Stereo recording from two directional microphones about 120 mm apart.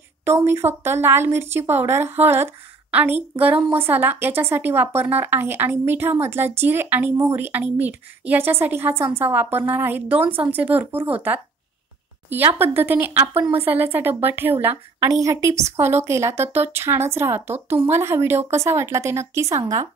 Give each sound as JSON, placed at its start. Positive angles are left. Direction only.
{"t": 0.5, "sound": "a woman's voice", "side_deg": -20}